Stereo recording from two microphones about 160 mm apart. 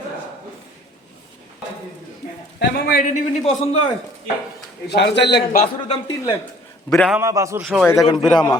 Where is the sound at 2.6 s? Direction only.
75° left (ahead or behind).